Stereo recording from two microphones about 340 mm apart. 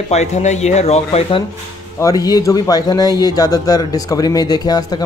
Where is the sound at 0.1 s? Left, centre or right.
Centre.